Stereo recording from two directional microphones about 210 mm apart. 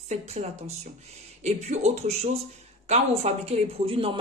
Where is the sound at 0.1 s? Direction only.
30° right (ahead or behind).